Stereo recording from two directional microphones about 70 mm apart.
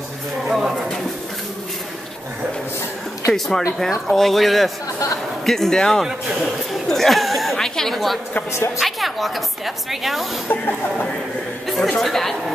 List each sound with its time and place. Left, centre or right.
0.5 s bird: centre
3.3 s speech: centre
6.0 s speech: centre
6.9 s a sound: centre
8.7 s a woman's voice: centre
11.6 s speech: centre